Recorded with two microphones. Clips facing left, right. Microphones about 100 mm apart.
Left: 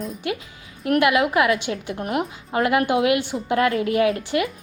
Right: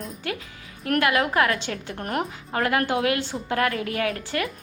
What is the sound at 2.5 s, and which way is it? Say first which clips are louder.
A woman's voice: left 4 dB; 20° left (ahead or behind).